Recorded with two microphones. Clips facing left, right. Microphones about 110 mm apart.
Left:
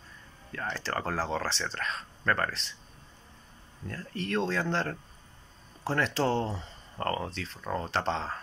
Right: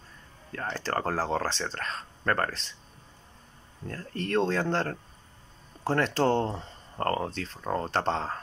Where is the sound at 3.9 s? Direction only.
45° right (ahead or behind).